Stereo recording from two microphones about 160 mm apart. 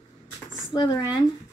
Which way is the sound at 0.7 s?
25° left (ahead or behind).